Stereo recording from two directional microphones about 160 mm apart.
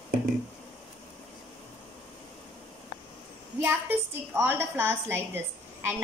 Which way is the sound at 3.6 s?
15° right (ahead or behind).